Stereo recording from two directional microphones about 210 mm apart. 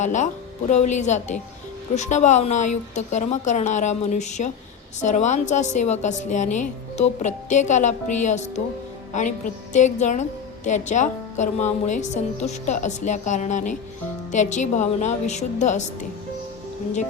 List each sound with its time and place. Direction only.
0.0 s a woman's voice: 35° left (ahead or behind)